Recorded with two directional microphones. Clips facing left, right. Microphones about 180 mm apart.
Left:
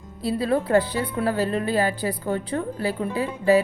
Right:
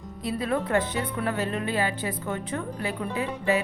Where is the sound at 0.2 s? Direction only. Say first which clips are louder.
Left 5 dB; 30° left (ahead or behind).